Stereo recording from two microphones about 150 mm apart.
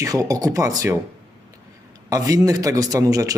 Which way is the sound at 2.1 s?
25° right (ahead or behind).